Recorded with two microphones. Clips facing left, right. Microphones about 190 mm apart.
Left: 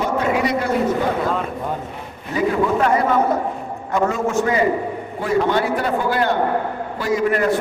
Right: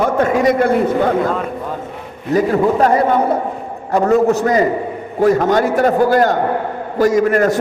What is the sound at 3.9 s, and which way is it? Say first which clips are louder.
A man's voice: right 6 dB; 35° right (ahead or behind).